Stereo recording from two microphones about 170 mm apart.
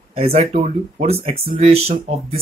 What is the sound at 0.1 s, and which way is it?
Speech, 35° right (ahead or behind).